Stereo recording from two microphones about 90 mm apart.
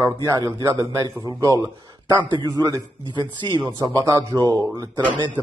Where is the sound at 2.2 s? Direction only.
55° right (ahead or behind).